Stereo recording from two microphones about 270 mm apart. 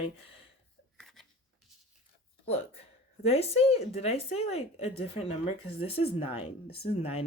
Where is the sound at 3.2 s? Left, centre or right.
Left.